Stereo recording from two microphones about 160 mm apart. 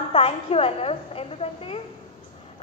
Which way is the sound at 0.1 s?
35° left (ahead or behind).